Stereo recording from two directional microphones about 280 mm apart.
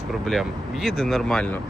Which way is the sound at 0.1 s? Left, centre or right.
Centre.